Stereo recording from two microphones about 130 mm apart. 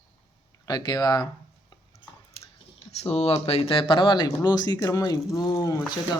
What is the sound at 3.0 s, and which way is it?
Speech, 50° left (ahead or behind).